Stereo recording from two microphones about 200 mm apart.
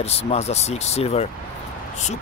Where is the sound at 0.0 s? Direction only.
30° left (ahead or behind).